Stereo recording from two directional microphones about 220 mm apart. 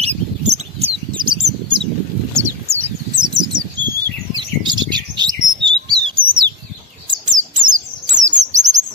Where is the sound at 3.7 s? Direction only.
20° right (ahead or behind).